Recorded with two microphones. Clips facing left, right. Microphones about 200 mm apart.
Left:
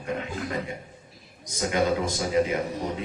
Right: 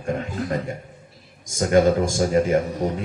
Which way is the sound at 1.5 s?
45° right (ahead or behind).